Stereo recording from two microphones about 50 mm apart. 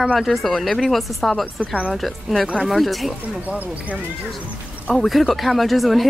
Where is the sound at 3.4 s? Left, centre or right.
Right.